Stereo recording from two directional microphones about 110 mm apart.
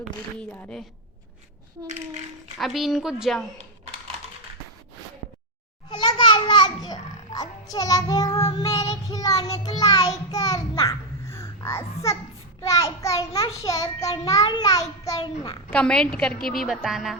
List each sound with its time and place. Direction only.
0.3 s a woman's voice: 10° left (ahead or behind)
2.6 s a woman's voice: centre (ahead or behind)
5.9 s a child's voice: 40° left (ahead or behind)
15.2 s a child's voice: 45° left (ahead or behind)
15.7 s a woman's voice: 5° left (ahead or behind)